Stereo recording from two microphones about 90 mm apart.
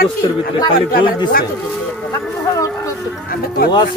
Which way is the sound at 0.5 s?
60° left (ahead or behind).